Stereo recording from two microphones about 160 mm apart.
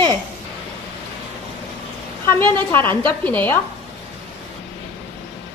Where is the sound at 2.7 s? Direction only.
10° left (ahead or behind).